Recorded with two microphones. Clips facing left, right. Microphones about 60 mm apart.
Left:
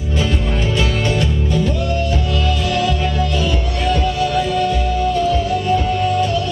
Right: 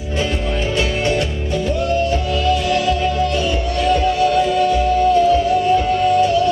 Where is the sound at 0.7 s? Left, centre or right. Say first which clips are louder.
Right 1 dB; centre.